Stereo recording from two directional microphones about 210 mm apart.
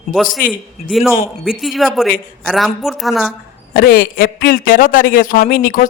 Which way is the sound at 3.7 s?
45° left (ahead or behind).